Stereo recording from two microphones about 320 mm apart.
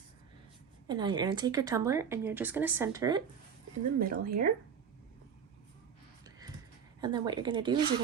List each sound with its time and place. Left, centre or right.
0.9 s speech: centre
3.9 s speech: right
7.0 s speech: centre